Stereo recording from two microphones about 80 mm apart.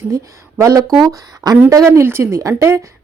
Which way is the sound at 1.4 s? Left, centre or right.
Right.